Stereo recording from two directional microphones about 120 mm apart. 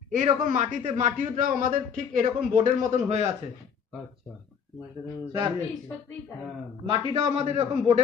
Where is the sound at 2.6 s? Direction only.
70° right (ahead or behind).